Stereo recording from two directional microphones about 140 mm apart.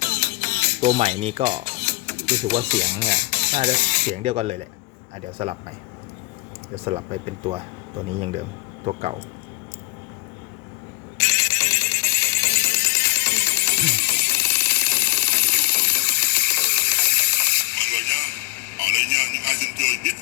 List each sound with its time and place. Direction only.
0.0 s music: 15° left (ahead or behind)
0.9 s speech: 50° right (ahead or behind)
1.8 s music: 15° left (ahead or behind)
2.7 s speech: 15° left (ahead or behind)
4.1 s speech: 45° right (ahead or behind)
6.7 s speech: 45° right (ahead or behind)
11.5 s music: 20° left (ahead or behind)